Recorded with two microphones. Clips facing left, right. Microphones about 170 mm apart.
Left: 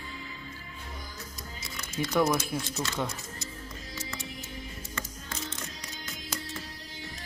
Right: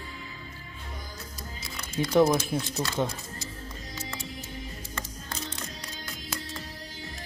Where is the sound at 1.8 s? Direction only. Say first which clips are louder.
Right 5 dB; 30° right (ahead or behind).